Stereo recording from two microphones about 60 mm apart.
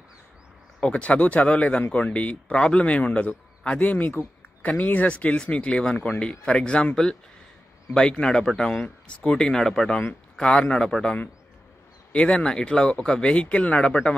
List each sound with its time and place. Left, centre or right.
0.7 s speech: centre